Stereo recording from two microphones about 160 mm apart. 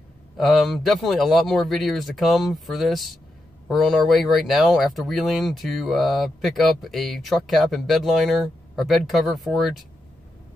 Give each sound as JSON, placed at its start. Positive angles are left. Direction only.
{"t": 0.4, "sound": "speech", "side_deg": 0}